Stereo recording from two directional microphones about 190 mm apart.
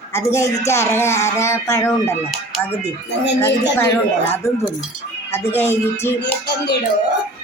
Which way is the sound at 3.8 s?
15° left (ahead or behind).